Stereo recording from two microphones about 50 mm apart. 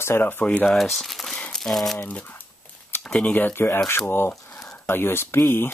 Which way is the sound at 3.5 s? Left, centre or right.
Left.